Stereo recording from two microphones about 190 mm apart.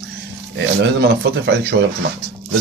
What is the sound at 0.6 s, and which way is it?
Speech, 65° right (ahead or behind).